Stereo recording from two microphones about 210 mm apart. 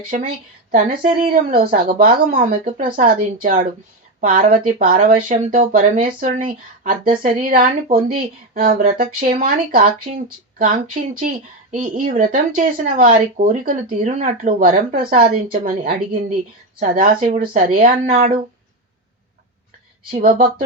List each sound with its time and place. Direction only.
0.1 s speech: 35° right (ahead or behind)
0.9 s speech: 25° right (ahead or behind)
1.3 s speech: 40° right (ahead or behind)
14.9 s speech: 25° right (ahead or behind)
15.6 s speech: 35° right (ahead or behind)
20.1 s speech: 40° right (ahead or behind)